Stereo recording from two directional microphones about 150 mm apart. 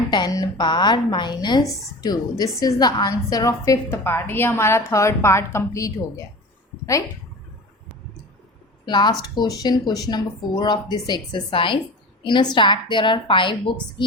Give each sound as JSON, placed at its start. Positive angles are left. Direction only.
{"t": 0.1, "sound": "a woman's voice", "side_deg": 25}
{"t": 8.9, "sound": "a woman's voice", "side_deg": 30}